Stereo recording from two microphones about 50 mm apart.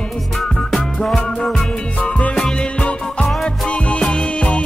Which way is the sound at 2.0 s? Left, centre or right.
Left.